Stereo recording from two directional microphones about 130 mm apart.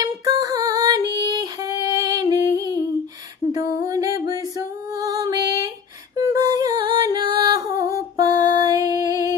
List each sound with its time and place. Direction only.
0.0 s female singing: 30° right (ahead or behind)
3.8 s music: 25° right (ahead or behind)